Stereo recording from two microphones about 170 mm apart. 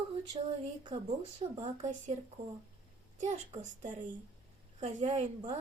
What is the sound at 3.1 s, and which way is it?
Speech, 45° right (ahead or behind).